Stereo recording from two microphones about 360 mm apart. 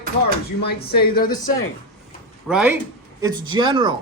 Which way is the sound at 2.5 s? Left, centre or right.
Centre.